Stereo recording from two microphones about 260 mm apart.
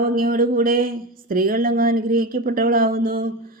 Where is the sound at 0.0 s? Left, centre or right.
Right.